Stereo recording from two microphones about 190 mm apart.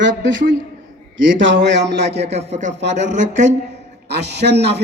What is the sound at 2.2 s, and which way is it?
Speech, 35° right (ahead or behind).